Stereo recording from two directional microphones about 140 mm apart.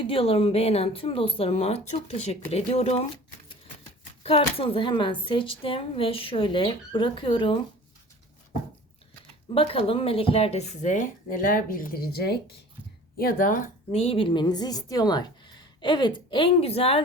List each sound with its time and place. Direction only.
0.0 s speech: 40° left (ahead or behind)
4.2 s speech: 40° left (ahead or behind)
9.6 s speech: 40° left (ahead or behind); by 13.7 s 75° left (ahead or behind)
13.9 s speech: 45° left (ahead or behind)